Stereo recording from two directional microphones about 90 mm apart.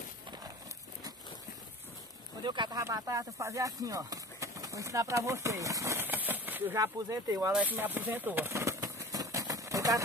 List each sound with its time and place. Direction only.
2.4 s speech: 55° right (ahead or behind)
2.8 s speech: 35° right (ahead or behind)
6.0 s speech: 20° right (ahead or behind)
6.8 s speech: 40° right (ahead or behind)
7.5 s speech: 20° right (ahead or behind)
8.5 s vehicle: 35° right (ahead or behind)